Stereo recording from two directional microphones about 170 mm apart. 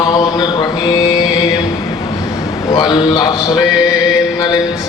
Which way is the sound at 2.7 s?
25° left (ahead or behind).